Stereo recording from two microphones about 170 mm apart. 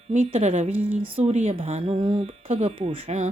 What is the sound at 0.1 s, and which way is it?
Speech, 35° right (ahead or behind).